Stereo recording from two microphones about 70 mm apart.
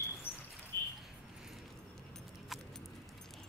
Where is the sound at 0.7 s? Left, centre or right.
Left.